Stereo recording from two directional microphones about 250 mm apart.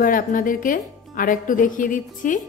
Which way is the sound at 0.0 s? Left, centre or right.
Left.